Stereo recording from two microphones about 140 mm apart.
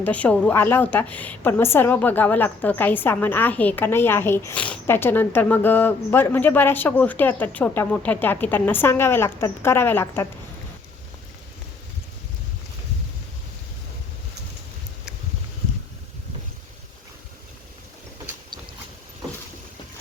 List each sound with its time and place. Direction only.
0.0 s a woman's voice: 10° left (ahead or behind)